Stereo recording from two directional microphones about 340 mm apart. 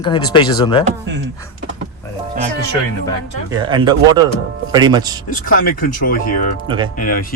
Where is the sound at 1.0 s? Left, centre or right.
Right.